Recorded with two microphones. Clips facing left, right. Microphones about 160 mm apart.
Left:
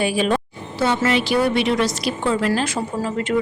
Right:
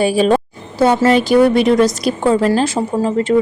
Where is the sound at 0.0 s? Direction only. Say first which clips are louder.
Right 7 dB; 35° right (ahead or behind).